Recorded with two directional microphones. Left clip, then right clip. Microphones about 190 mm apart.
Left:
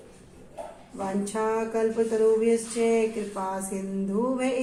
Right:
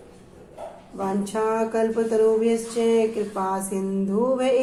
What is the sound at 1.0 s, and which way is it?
A woman's voice, 30° right (ahead or behind).